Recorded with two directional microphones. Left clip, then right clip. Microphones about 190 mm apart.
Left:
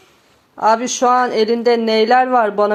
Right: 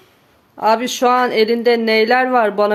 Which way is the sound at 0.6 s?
15° right (ahead or behind).